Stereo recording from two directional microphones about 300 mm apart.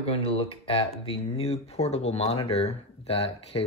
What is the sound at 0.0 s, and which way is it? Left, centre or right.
Speech, centre.